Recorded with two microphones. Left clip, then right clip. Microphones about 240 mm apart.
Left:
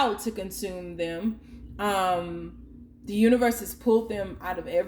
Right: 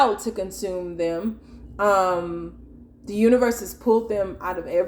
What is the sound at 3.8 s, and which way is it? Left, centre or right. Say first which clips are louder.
Speech: right 4 dB; left.